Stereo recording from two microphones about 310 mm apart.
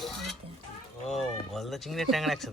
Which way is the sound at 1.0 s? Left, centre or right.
Centre.